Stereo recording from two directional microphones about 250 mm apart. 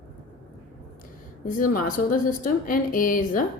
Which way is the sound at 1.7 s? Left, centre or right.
Left.